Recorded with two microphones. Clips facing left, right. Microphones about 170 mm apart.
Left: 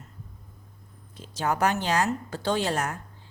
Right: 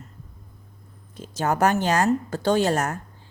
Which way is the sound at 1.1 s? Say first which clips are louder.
Right 3 dB; 45° right (ahead or behind).